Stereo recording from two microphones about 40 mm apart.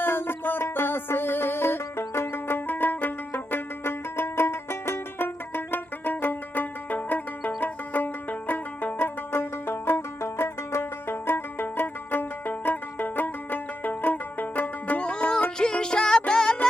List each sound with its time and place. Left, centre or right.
0.0 s music: left
2.6 s music: left
3.8 s music: left; by 16.6 s centre